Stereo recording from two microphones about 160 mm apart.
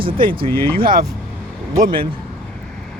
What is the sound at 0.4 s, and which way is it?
Speech, 15° left (ahead or behind).